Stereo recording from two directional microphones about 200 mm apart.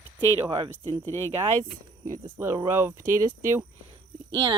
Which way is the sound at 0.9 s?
10° left (ahead or behind).